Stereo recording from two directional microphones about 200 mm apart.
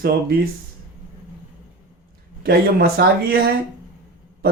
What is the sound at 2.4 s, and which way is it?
Speech, 50° right (ahead or behind).